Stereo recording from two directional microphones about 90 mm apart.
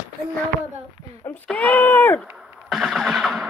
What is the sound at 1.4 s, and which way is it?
Speech, 15° left (ahead or behind).